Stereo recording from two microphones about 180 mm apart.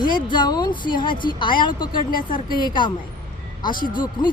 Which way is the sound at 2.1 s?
50° left (ahead or behind).